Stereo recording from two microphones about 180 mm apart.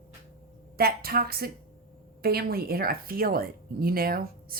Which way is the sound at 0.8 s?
55° right (ahead or behind).